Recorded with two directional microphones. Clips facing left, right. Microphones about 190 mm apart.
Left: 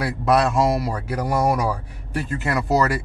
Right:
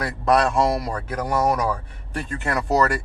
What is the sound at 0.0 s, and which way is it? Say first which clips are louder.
A man's voice: left 1 dB; 5° left (ahead or behind).